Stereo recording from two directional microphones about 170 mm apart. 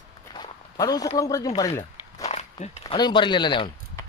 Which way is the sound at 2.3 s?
40° left (ahead or behind).